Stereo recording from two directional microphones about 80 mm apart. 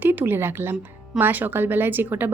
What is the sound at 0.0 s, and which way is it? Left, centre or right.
A woman's voice, right.